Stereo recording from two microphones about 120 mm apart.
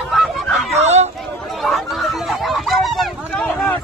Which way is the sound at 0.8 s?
65° right (ahead or behind).